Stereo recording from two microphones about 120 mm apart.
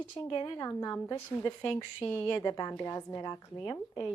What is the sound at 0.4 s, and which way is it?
Speech, 30° left (ahead or behind).